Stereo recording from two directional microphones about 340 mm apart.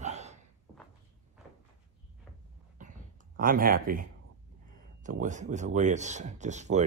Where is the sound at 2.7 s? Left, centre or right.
Right.